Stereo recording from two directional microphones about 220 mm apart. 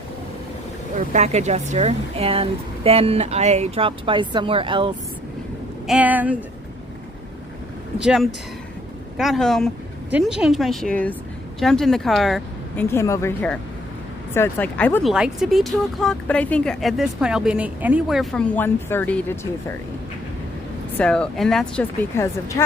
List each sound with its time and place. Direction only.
0.9 s speech: 30° right (ahead or behind)
5.9 s speech: 5° right (ahead or behind)
7.9 s speech: 5° right (ahead or behind)
12.9 s speech: 15° left (ahead or behind)
21.0 s speech: 5° left (ahead or behind)